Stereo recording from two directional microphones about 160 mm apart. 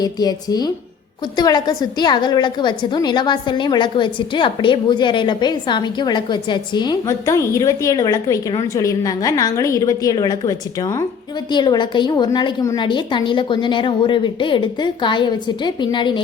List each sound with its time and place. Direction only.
0.0 s a woman's voice: 25° left (ahead or behind)